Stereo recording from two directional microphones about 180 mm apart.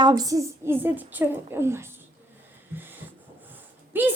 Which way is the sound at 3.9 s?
10° right (ahead or behind).